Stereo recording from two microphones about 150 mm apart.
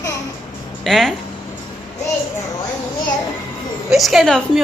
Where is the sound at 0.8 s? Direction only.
Centre (ahead or behind).